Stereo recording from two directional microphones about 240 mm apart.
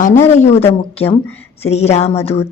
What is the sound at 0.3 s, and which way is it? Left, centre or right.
Speech, left.